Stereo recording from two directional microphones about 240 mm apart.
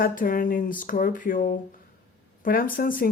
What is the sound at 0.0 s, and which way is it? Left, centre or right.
Speech, left.